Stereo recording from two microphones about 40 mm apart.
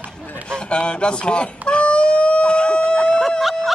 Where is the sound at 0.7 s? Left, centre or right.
Left.